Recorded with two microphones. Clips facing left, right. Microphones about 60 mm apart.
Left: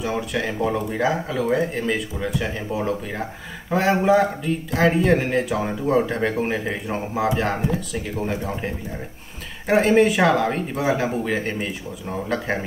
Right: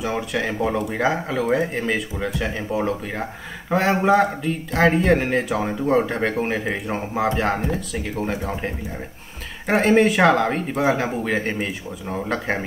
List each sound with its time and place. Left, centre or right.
0.0 s speech: centre